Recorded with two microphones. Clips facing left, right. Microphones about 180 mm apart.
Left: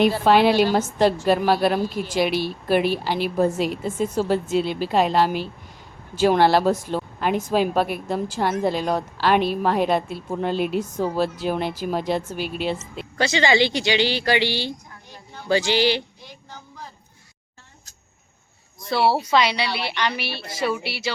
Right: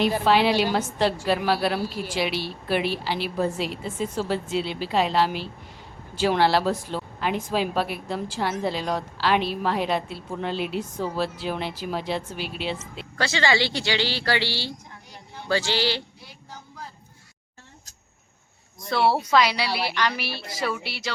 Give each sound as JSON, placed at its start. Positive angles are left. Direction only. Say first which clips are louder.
{"t": 0.3, "sound": "a woman's voice", "louder": "left 4 dB", "side_deg": 50}
{"t": 13.1, "sound": "speech", "louder": "left 4 dB", "side_deg": 20}
{"t": 18.9, "sound": "a woman's voice", "louder": "left 2 dB", "side_deg": 5}